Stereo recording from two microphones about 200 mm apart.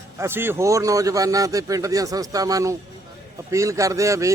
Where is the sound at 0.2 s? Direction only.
10° right (ahead or behind).